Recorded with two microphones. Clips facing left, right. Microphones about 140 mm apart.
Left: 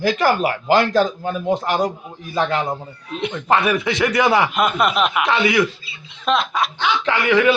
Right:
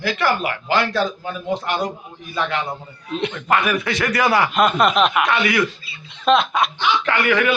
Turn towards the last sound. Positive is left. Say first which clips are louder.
# left 3 dB
turn(degrees=25)  # may be behind; listen again after turning